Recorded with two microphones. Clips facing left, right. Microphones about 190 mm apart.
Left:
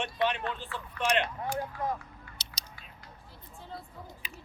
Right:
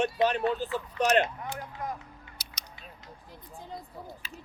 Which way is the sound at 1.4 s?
30° left (ahead or behind).